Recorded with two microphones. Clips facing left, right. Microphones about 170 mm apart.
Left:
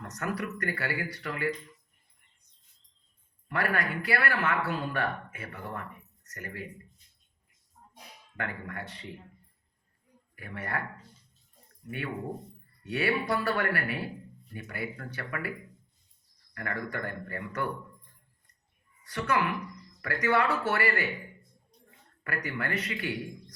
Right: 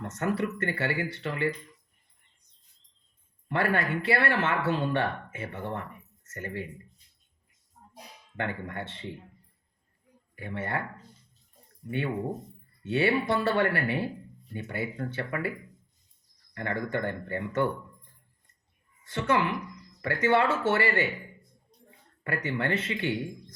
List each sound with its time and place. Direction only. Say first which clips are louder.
0.0 s speech: right 5 dB; 25° right (ahead or behind)
3.5 s speech: right 3 dB; 25° right (ahead or behind)
7.9 s speech: right 4 dB; 25° right (ahead or behind)
10.3 s speech: right 3 dB; 25° right (ahead or behind)
11.9 s speech: right 5 dB; 25° right (ahead or behind)
16.6 s speech: right 5 dB; 25° right (ahead or behind)
19.0 s speech: right 2 dB; 25° right (ahead or behind)
22.2 s speech: right 4 dB; 25° right (ahead or behind)